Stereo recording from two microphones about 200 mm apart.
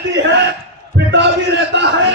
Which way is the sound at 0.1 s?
60° right (ahead or behind).